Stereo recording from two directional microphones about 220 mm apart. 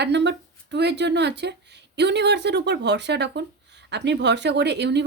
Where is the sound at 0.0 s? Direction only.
50° right (ahead or behind).